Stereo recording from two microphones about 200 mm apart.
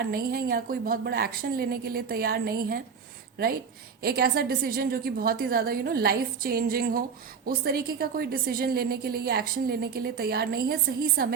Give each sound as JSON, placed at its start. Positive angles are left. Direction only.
{"t": 0.0, "sound": "a woman's voice", "side_deg": -50}